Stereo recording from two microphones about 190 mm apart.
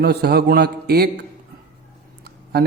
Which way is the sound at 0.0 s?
60° right (ahead or behind).